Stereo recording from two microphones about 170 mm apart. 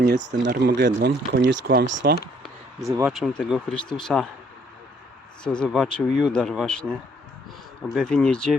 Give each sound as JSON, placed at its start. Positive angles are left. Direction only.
{"t": 0.0, "sound": "speech", "side_deg": -85}
{"t": 2.8, "sound": "speech", "side_deg": -15}
{"t": 3.1, "sound": "speech", "side_deg": 0}
{"t": 5.4, "sound": "speech", "side_deg": 5}